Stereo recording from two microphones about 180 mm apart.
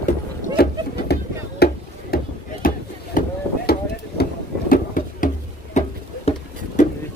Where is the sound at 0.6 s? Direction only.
60° left (ahead or behind).